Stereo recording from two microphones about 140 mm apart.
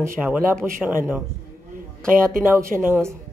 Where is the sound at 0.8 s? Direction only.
15° right (ahead or behind).